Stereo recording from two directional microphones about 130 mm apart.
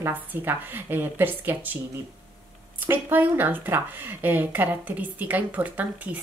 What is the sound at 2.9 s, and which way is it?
Speech, 15° right (ahead or behind).